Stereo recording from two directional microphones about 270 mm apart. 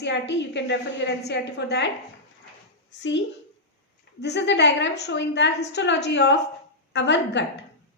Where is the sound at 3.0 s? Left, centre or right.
Left.